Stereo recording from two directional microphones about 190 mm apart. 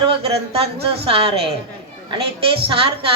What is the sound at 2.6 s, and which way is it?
Speech, 30° right (ahead or behind).